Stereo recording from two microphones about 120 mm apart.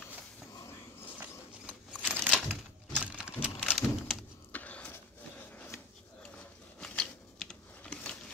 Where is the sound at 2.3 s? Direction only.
5° left (ahead or behind).